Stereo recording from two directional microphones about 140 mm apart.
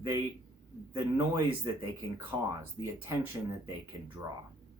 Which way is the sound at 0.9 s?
20° right (ahead or behind).